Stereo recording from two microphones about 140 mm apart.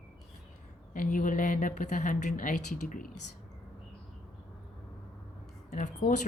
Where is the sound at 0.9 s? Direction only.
70° left (ahead or behind).